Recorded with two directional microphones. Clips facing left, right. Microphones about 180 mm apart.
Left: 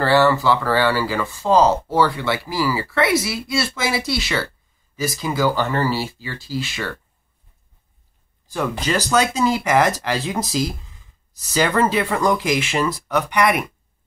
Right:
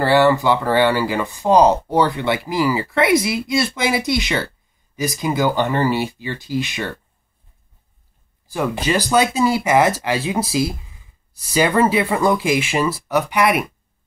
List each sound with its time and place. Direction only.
0.0 s speech: 15° right (ahead or behind)
8.5 s speech: 10° right (ahead or behind)